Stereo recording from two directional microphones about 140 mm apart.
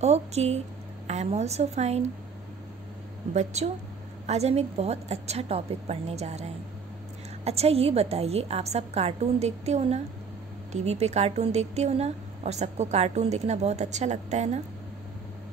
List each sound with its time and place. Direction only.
0.0 s a woman's voice: 50° right (ahead or behind)
3.3 s a woman's voice: 50° right (ahead or behind)
7.4 s a woman's voice: 45° right (ahead or behind)